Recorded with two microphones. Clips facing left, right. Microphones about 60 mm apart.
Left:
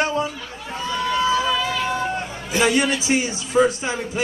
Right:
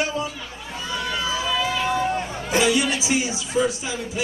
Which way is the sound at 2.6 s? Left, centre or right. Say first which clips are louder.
Left 2 dB; left.